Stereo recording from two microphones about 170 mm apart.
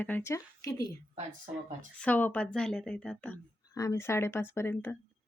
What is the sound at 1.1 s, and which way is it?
Speech, 45° right (ahead or behind).